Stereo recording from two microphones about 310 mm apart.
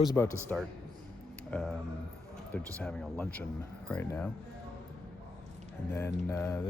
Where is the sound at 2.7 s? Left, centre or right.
Centre.